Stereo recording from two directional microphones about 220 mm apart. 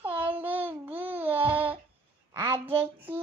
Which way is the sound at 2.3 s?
15° right (ahead or behind).